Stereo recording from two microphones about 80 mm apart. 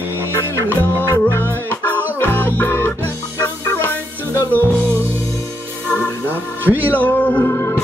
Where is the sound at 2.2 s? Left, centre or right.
Left.